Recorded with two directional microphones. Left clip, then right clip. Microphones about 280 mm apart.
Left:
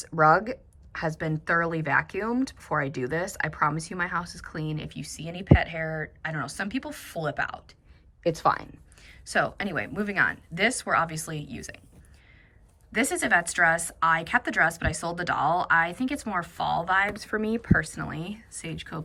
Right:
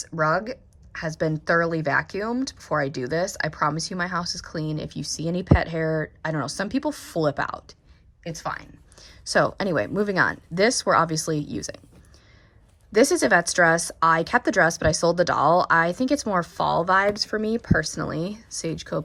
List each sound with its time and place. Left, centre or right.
0.0 s a woman's voice: centre
8.2 s speech: centre
9.0 s a woman's voice: centre
12.9 s a woman's voice: centre